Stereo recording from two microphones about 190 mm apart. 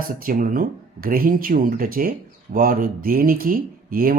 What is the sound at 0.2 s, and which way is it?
Speech, 45° right (ahead or behind).